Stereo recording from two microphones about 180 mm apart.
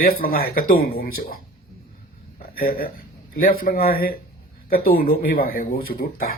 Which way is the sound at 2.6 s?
55° left (ahead or behind).